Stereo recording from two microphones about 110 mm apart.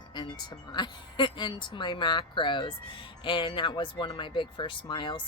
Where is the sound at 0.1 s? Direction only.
45° left (ahead or behind).